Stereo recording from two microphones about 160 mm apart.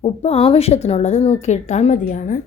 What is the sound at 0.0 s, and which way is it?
A woman's voice, 40° left (ahead or behind).